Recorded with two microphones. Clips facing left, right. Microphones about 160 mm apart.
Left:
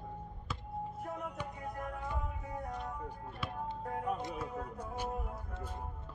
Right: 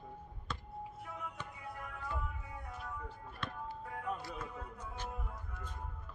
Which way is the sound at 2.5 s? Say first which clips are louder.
Left 7 dB; 40° left (ahead or behind).